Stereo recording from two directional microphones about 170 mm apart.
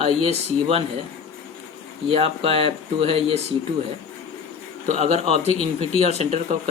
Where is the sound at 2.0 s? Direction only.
35° right (ahead or behind).